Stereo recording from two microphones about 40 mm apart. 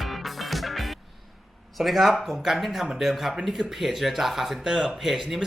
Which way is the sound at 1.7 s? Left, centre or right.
Centre.